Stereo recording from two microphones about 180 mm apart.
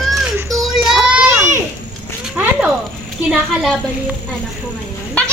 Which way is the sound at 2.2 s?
5° right (ahead or behind).